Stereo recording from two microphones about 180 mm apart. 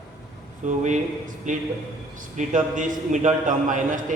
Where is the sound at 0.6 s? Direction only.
40° right (ahead or behind).